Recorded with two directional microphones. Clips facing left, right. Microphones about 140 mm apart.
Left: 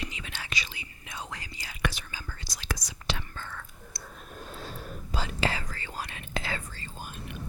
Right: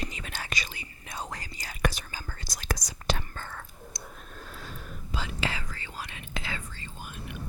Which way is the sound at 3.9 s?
20° right (ahead or behind).